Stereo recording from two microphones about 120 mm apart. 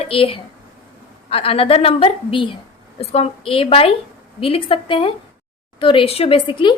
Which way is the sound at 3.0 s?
60° left (ahead or behind).